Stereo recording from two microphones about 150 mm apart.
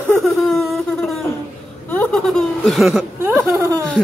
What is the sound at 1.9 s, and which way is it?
Snicker, 10° left (ahead or behind).